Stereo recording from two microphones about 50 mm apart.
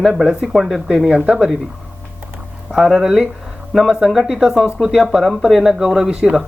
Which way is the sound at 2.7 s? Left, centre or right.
Centre.